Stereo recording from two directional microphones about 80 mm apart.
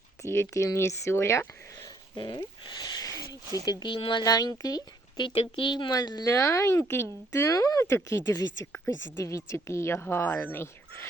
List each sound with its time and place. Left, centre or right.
0.2 s speech: left
2.1 s speech: left
4.2 s speech: left
5.2 s a woman's voice: left
6.2 s speech: left
7.9 s speech: left